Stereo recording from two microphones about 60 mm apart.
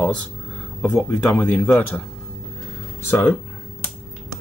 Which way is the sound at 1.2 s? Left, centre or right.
Left.